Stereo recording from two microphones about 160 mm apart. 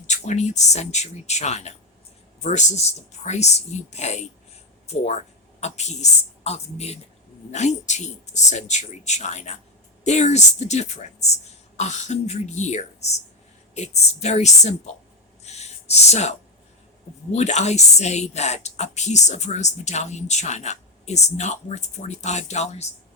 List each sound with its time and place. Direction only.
0.1 s a woman's voice: 45° left (ahead or behind)
5.5 s a woman's voice: 45° left (ahead or behind)
15.4 s a sound: 45° left (ahead or behind)
17.3 s a woman's voice: 45° left (ahead or behind)